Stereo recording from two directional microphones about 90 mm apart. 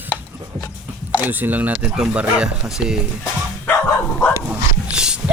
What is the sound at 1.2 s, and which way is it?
Speech, 20° right (ahead or behind).